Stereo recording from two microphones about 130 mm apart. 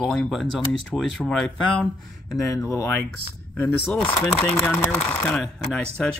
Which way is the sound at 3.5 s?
10° left (ahead or behind).